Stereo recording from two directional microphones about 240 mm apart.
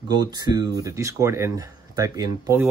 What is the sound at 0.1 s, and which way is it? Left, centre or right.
Speech, centre.